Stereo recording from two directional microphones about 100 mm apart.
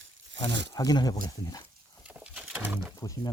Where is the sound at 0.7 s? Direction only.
40° left (ahead or behind).